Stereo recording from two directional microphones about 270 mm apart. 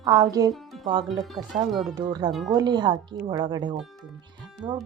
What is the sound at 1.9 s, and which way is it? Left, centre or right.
Speech, centre.